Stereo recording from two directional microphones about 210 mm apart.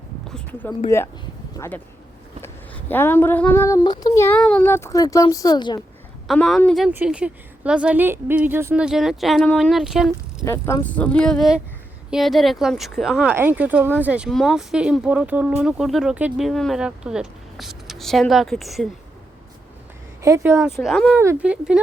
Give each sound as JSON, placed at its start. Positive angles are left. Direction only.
{"t": 0.3, "sound": "a sound", "side_deg": 5}
{"t": 0.9, "sound": "speech", "side_deg": 10}
{"t": 2.9, "sound": "speech", "side_deg": 10}
{"t": 6.2, "sound": "speech", "side_deg": 0}
{"t": 10.4, "sound": "speech", "side_deg": 15}
{"t": 20.2, "sound": "speech", "side_deg": -15}